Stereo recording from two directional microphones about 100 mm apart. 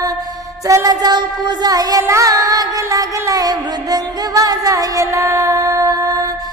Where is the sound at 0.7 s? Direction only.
35° right (ahead or behind).